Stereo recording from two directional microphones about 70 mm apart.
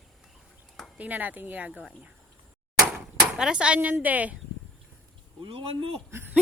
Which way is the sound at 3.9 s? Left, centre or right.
Right.